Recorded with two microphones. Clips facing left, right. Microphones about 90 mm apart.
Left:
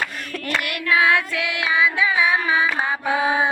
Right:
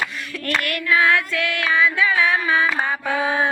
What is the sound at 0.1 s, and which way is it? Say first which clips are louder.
Clapping: left 1 dB; 45° left (ahead or behind).